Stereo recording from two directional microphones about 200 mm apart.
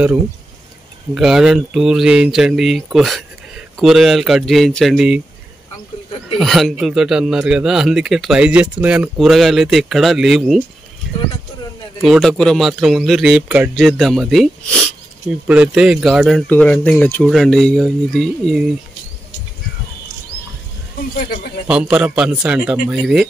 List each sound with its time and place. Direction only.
1.1 s speech: centre (ahead or behind)
6.3 s speech: centre (ahead or behind)
12.0 s speech: centre (ahead or behind)
21.2 s a man's voice: 45° left (ahead or behind)
21.6 s speech: 5° right (ahead or behind)